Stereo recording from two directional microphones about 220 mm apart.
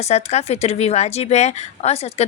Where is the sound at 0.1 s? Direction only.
30° left (ahead or behind).